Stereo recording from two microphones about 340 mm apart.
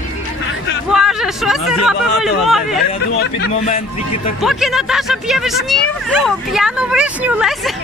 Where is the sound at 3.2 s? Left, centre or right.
Left.